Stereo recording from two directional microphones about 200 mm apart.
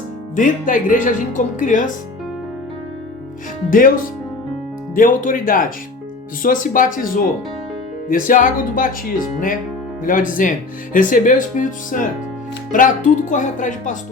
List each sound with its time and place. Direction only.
0.3 s speech: 40° left (ahead or behind)
3.7 s speech: 45° left (ahead or behind)